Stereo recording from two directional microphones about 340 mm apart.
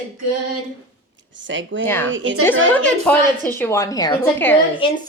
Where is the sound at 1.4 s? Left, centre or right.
Right.